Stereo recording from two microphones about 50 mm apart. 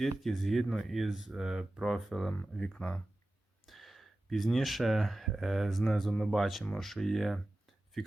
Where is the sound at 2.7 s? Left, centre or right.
Centre.